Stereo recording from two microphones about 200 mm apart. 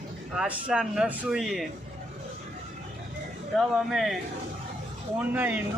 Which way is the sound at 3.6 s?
Centre (ahead or behind).